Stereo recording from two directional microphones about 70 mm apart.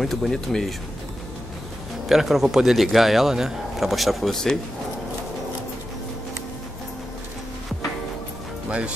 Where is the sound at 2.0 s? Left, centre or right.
Centre.